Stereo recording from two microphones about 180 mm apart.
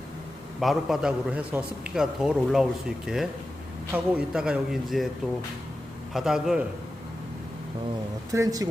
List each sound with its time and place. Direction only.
0.6 s a man's voice: centre (ahead or behind)
6.1 s a man's voice: centre (ahead or behind)
8.3 s speech: 20° right (ahead or behind)